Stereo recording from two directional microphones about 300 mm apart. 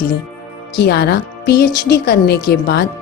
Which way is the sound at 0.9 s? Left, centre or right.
Left.